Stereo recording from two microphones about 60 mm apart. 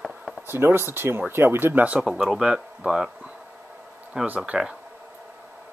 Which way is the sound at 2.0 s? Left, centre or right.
Centre.